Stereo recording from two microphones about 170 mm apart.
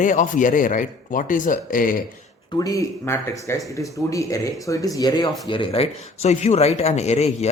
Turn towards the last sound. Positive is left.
turn(degrees=40)  # may be behind; listen again after turning